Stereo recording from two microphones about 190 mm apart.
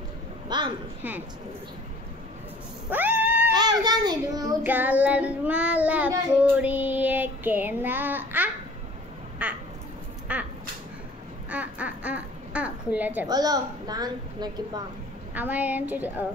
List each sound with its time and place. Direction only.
0.5 s a sound: 25° right (ahead or behind)
2.9 s a sound: 10° right (ahead or behind)
3.5 s a woman's voice: 20° right (ahead or behind)
4.6 s child singing: 10° right (ahead or behind)
9.4 s quack: 5° right (ahead or behind)
10.3 s duck: 5° right (ahead or behind)
11.5 s a sound: 5° right (ahead or behind)
13.3 s a woman's voice: 20° right (ahead or behind)
15.3 s child singing: 10° right (ahead or behind)